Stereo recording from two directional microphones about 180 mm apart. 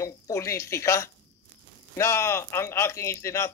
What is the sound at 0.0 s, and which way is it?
Speech, 15° left (ahead or behind).